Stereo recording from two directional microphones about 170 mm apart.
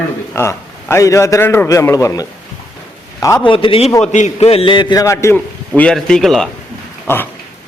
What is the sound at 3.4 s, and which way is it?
A man's voice, 30° left (ahead or behind).